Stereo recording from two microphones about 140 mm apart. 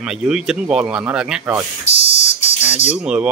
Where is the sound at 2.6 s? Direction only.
15° right (ahead or behind).